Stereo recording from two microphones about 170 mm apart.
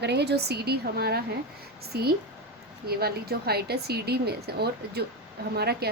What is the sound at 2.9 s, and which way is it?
A woman's voice, 65° right (ahead or behind).